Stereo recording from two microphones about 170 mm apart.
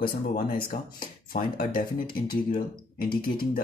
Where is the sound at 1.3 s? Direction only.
60° left (ahead or behind).